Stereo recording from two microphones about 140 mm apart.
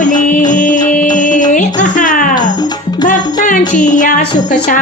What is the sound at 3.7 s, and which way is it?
Music, 65° left (ahead or behind).